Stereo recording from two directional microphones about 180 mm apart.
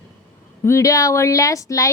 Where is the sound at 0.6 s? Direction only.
15° left (ahead or behind).